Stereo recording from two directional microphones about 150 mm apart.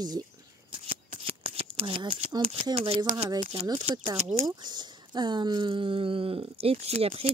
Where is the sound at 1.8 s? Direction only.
40° right (ahead or behind).